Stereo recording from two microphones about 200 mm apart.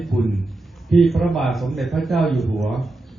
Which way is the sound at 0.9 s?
Centre (ahead or behind).